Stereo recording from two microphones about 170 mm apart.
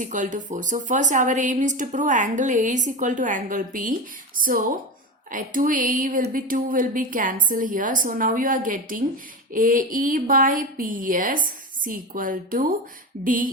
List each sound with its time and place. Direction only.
0.0 s a woman's voice: 50° right (ahead or behind)